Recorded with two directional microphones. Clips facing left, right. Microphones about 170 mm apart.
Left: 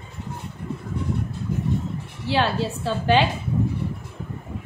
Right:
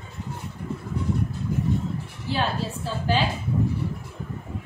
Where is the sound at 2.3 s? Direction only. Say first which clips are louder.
Left 4 dB; 75° left (ahead or behind).